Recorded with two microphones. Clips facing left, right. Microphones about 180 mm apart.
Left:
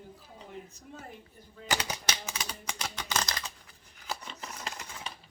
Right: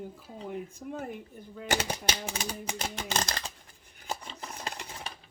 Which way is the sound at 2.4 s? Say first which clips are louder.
Right 4 dB; 50° right (ahead or behind).